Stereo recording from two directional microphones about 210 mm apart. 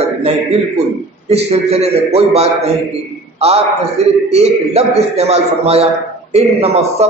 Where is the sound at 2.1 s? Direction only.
30° right (ahead or behind).